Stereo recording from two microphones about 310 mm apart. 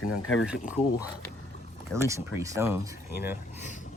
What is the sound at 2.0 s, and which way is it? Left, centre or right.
Speech, centre.